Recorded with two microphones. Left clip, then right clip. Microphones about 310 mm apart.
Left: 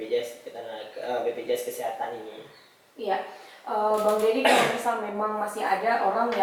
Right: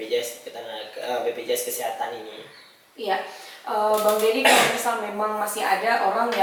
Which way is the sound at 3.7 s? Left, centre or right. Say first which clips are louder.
Right 3 dB; centre.